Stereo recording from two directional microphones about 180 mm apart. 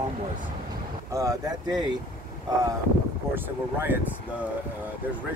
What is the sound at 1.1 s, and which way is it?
Speech, 20° right (ahead or behind).